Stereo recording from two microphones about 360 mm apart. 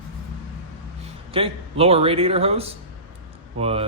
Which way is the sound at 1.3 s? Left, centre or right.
Centre.